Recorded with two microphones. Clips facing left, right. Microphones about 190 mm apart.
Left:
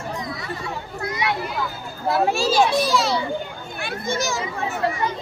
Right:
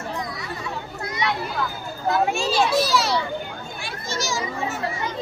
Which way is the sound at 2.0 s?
35° left (ahead or behind).